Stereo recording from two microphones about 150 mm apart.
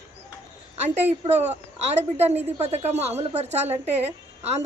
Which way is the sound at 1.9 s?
45° right (ahead or behind).